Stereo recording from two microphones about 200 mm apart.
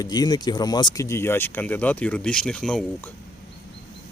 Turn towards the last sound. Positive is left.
turn(degrees=5)  # may be behind; listen again after turning